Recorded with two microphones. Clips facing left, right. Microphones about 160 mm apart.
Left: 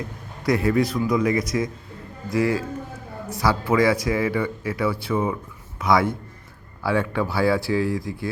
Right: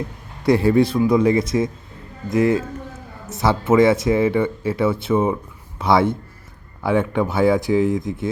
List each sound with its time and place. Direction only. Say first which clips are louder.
0.4 s speech: right 5 dB; 30° right (ahead or behind)